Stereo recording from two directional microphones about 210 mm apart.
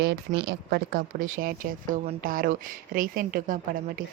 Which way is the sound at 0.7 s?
45° right (ahead or behind).